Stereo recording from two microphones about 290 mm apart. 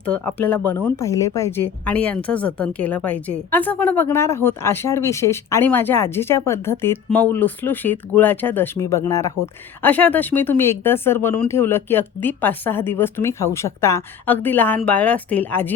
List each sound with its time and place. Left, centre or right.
0.0 s a woman's voice: centre